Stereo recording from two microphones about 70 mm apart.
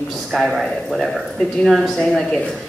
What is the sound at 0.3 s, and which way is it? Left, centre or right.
A man's voice, centre.